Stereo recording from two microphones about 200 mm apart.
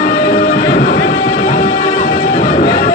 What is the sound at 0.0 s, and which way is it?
Music, 50° left (ahead or behind).